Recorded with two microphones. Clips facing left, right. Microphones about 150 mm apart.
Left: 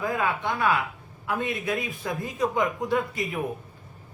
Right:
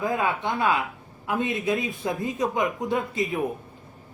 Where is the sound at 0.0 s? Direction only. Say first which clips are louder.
Right 1 dB; 20° right (ahead or behind).